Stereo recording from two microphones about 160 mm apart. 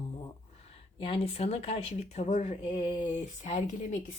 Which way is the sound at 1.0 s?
35° left (ahead or behind).